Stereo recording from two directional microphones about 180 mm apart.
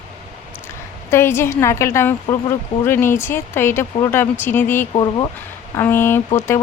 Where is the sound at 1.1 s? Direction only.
15° left (ahead or behind).